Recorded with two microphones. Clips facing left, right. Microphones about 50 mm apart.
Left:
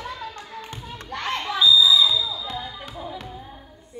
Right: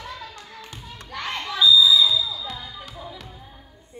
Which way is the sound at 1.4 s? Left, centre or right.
Left.